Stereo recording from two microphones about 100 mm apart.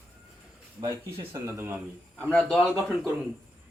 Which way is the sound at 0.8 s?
30° right (ahead or behind).